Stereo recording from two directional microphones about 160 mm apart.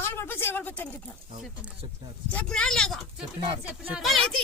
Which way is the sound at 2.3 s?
5° left (ahead or behind).